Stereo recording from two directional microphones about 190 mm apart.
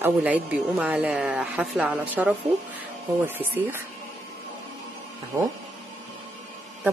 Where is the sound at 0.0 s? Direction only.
5° right (ahead or behind).